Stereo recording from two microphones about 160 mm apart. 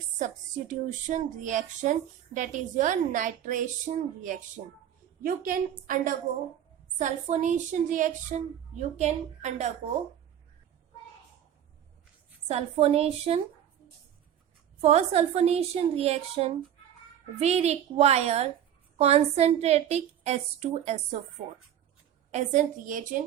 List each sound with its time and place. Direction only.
0.2 s a woman's voice: 50° right (ahead or behind)
12.5 s a woman's voice: 40° right (ahead or behind)
14.8 s a woman's voice: 40° right (ahead or behind)
22.3 s speech: 50° right (ahead or behind)